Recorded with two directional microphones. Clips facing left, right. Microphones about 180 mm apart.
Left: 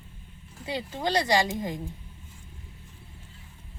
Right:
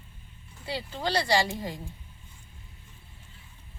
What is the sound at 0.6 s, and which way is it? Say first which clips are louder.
Speech: left 2 dB; 15° left (ahead or behind).